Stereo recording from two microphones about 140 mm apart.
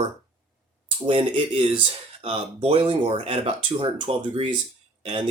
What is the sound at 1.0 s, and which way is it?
Speech, 40° right (ahead or behind).